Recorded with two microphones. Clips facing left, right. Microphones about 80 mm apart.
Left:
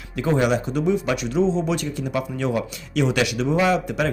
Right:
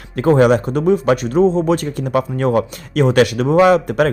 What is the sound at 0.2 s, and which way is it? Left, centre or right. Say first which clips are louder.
Speech: right 8 dB; right.